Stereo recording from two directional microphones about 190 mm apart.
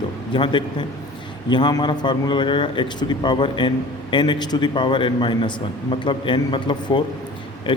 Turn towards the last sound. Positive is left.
turn(degrees=25)  # may be behind; listen again after turning